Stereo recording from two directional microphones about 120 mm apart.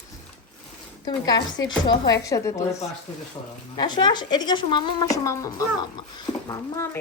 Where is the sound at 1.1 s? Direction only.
35° left (ahead or behind).